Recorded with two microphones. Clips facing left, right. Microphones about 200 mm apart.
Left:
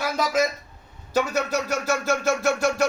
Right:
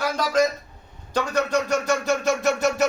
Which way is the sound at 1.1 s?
5° left (ahead or behind).